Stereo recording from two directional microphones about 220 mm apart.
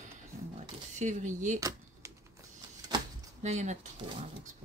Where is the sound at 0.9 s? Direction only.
35° right (ahead or behind).